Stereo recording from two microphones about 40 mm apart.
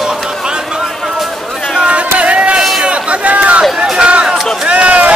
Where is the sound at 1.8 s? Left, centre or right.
Right.